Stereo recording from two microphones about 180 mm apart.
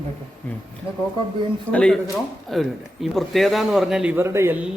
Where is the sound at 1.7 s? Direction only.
5° left (ahead or behind); by 4.6 s 15° right (ahead or behind).